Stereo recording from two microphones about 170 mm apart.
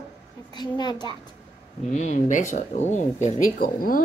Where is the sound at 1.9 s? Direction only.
45° left (ahead or behind).